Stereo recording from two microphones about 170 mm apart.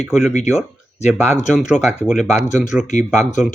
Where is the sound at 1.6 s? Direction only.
Centre (ahead or behind).